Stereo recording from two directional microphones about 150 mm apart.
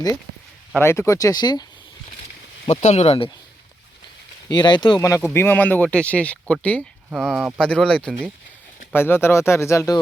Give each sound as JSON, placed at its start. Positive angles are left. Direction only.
{"t": 0.8, "sound": "speech", "side_deg": 15}
{"t": 2.6, "sound": "speech", "side_deg": 50}
{"t": 4.4, "sound": "speech", "side_deg": 30}